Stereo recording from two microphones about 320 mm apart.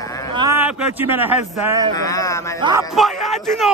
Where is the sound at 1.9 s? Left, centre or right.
Centre.